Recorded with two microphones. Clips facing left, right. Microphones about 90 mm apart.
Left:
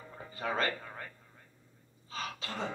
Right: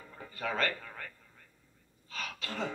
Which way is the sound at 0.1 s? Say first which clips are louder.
Left 1 dB; 25° left (ahead or behind).